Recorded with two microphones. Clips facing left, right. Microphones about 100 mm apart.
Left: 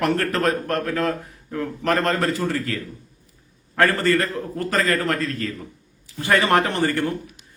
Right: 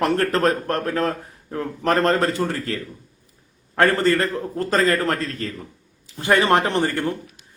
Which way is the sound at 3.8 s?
25° right (ahead or behind).